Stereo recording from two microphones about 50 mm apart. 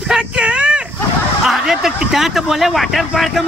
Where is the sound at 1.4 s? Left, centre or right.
Centre.